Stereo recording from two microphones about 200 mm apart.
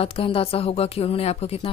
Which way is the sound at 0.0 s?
30° left (ahead or behind).